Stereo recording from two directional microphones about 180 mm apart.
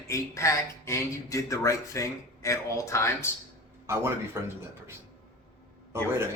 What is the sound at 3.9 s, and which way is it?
Speech, 15° right (ahead or behind).